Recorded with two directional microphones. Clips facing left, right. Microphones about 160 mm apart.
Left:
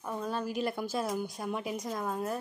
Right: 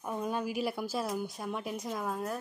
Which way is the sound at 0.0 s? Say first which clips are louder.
Right 1 dB; 15° right (ahead or behind).